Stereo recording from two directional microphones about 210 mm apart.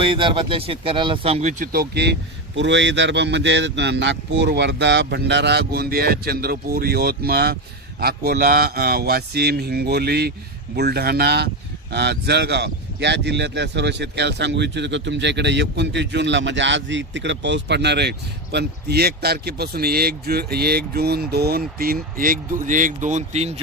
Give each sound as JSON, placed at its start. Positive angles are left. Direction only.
{"t": 0.0, "sound": "speech", "side_deg": -25}
{"t": 22.6, "sound": "speech", "side_deg": -40}